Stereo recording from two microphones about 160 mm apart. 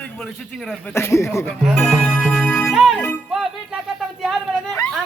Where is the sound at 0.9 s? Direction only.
15° left (ahead or behind).